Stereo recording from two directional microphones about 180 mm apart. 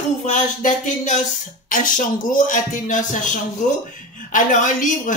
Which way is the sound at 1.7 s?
45° left (ahead or behind).